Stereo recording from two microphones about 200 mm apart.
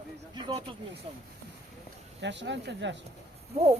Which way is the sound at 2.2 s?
60° right (ahead or behind).